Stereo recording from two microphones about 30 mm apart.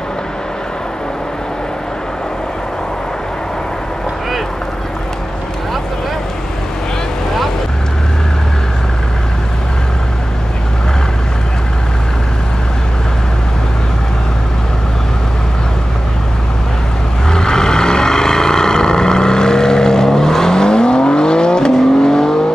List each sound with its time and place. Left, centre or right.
17.3 s vehicle: left